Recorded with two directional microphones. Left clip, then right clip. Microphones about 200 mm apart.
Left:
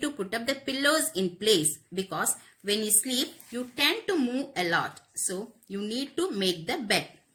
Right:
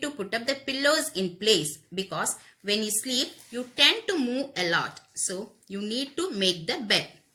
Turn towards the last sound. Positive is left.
turn(degrees=40)  # may be behind; listen again after turning